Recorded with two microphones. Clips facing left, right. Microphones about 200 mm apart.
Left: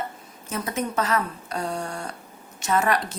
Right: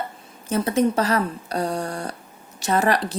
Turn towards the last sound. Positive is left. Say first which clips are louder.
# right 3 dB
turn(degrees=-35)  # may be behind; listen again after turning